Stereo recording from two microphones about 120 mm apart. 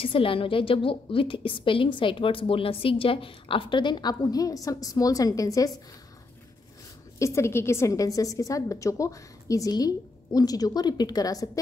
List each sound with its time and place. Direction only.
0.0 s a woman's voice: 50° left (ahead or behind); by 5.7 s 30° left (ahead or behind)
7.2 s a woman's voice: 25° left (ahead or behind)